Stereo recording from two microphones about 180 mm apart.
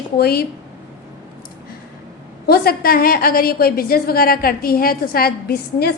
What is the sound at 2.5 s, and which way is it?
A woman's voice, 55° left (ahead or behind).